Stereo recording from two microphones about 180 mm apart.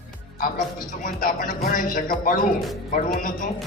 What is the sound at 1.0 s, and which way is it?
Speech, 50° left (ahead or behind).